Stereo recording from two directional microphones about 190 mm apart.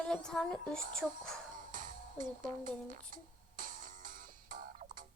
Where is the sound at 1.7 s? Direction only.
45° right (ahead or behind).